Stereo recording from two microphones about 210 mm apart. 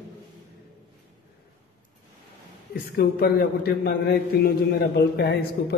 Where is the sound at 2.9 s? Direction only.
45° left (ahead or behind).